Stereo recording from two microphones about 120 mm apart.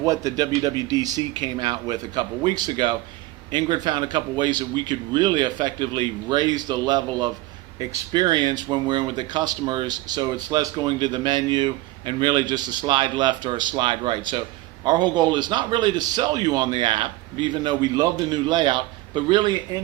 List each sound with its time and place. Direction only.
0.0 s speech: 30° right (ahead or behind)